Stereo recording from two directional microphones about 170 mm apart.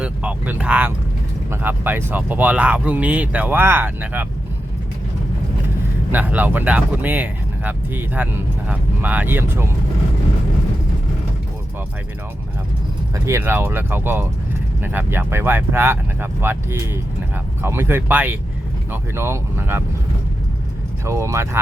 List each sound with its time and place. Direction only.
0.0 s speech: 10° right (ahead or behind)
6.1 s speech: 10° right (ahead or behind)
13.2 s speech: 15° right (ahead or behind)
21.0 s speech: 15° right (ahead or behind)